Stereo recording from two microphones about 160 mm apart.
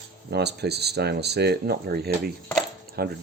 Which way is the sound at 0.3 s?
90° right.